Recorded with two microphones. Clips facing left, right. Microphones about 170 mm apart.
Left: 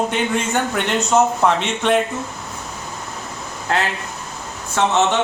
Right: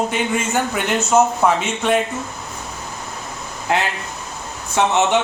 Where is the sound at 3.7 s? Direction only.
15° right (ahead or behind).